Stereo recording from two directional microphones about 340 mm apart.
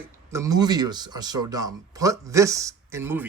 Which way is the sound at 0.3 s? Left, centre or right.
Centre.